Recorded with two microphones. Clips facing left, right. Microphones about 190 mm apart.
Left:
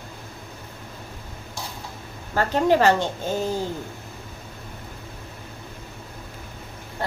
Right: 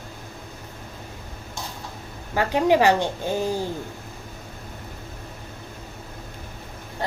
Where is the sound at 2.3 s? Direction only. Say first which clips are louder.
Even; 15° right (ahead or behind).